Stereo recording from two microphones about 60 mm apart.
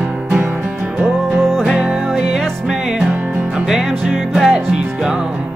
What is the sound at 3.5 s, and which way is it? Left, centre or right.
Music, centre.